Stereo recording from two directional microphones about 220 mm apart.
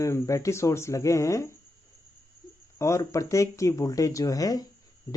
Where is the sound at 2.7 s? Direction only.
15° left (ahead or behind).